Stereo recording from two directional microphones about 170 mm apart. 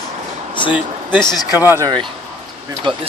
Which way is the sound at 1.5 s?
15° right (ahead or behind).